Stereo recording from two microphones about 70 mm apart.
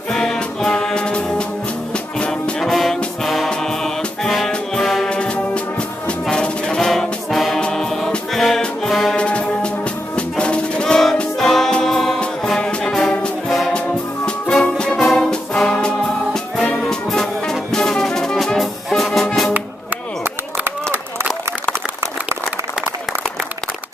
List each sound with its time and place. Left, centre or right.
0.1 s music: centre
2.7 s music: centre
9.1 s music: centre
13.7 s music: centre
16.6 s brass instrument: centre
20.2 s a sound: right